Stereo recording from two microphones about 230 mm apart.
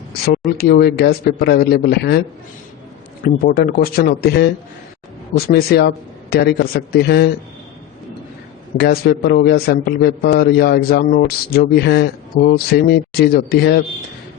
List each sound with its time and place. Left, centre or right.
0.5 s a man's voice: left
3.2 s a man's voice: left
5.5 s a man's voice: left
8.8 s a man's voice: left